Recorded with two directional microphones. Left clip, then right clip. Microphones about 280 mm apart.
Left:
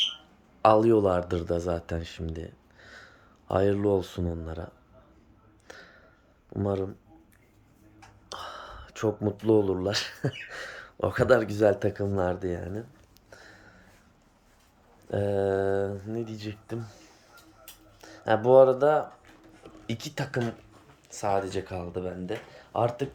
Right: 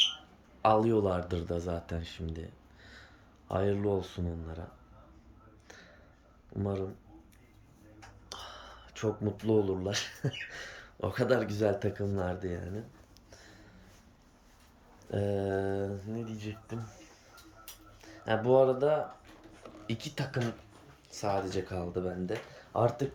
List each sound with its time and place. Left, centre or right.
0.6 s speech: centre
5.6 s a sound: centre
6.5 s speech: centre
8.3 s speech: centre
13.3 s a sound: centre
15.1 s speech: centre